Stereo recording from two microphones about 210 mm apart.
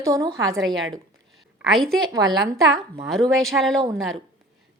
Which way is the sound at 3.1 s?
Centre (ahead or behind).